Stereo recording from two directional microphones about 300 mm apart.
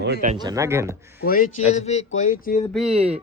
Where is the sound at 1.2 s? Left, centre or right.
Left.